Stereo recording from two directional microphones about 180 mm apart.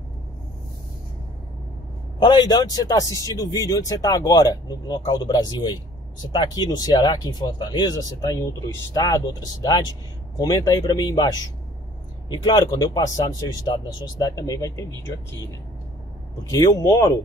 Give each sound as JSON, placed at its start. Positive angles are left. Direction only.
{"t": 2.1, "sound": "speech", "side_deg": 25}
{"t": 12.3, "sound": "speech", "side_deg": 25}
{"t": 16.4, "sound": "speech", "side_deg": 20}